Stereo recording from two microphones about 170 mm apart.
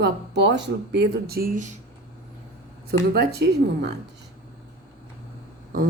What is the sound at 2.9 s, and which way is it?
Speech, 65° right (ahead or behind).